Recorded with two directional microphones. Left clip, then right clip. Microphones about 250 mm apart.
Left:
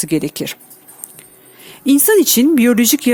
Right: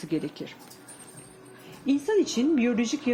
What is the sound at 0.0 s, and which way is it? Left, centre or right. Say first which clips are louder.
Speech: left 12 dB; left.